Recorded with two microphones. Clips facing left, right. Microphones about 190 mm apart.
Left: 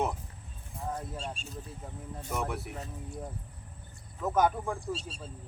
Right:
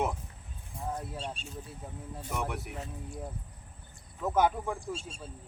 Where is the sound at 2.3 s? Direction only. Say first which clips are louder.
Left 1 dB; centre (ahead or behind).